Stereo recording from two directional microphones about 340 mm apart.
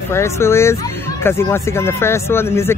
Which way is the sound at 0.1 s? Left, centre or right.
Centre.